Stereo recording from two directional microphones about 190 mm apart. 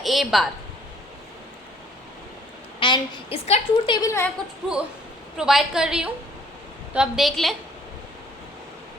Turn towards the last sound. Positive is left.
turn(degrees=0)  # may be behind; listen again after turning